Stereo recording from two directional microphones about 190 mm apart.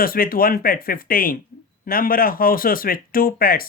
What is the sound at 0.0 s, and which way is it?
Speech, 50° left (ahead or behind).